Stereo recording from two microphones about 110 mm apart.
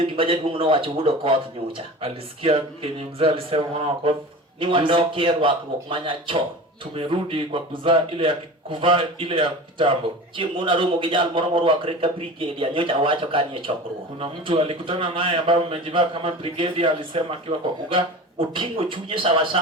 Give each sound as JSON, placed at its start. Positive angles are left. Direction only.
{"t": 0.0, "sound": "speech", "side_deg": -55}